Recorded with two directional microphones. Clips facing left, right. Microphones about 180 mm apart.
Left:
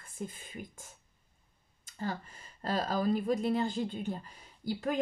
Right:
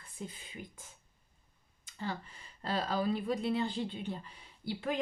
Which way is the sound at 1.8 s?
45° left (ahead or behind).